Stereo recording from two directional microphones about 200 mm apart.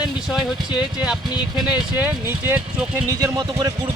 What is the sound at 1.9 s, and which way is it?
Speech, 10° right (ahead or behind).